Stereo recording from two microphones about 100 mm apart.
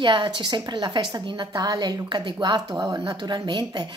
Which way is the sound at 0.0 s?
50° right (ahead or behind).